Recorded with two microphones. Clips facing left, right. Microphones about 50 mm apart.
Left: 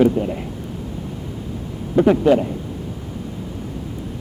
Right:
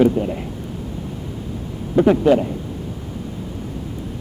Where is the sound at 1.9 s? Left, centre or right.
Left.